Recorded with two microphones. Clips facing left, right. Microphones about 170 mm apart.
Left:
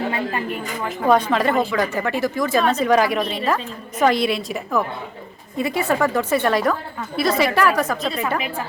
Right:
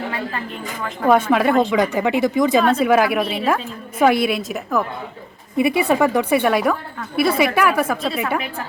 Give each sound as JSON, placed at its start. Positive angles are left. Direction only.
{"t": 0.1, "sound": "a sound", "side_deg": 20}
{"t": 0.9, "sound": "a woman's voice", "side_deg": -5}
{"t": 5.5, "sound": "a woman's voice", "side_deg": -15}